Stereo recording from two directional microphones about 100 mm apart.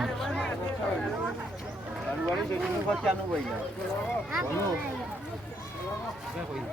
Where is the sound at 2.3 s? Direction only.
Centre (ahead or behind).